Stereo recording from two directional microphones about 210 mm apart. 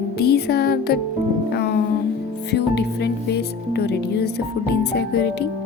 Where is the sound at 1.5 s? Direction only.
50° left (ahead or behind).